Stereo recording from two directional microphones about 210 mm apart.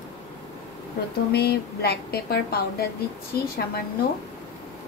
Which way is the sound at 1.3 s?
50° left (ahead or behind).